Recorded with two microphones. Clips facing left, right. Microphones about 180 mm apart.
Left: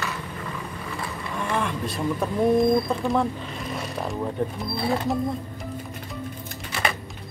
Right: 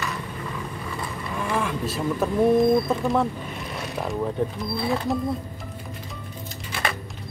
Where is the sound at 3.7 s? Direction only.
Centre (ahead or behind).